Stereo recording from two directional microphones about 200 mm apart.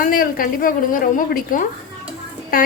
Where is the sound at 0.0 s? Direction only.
45° left (ahead or behind).